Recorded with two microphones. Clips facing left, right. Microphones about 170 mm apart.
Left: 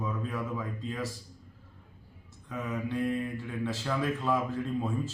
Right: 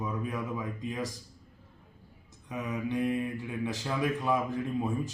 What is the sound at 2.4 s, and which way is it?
Speech, 15° right (ahead or behind).